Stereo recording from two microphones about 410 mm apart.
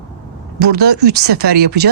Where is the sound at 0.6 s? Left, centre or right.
Right.